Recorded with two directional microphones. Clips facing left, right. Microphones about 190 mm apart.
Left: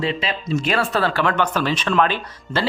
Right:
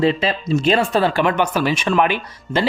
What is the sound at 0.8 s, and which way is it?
Speech, 15° right (ahead or behind).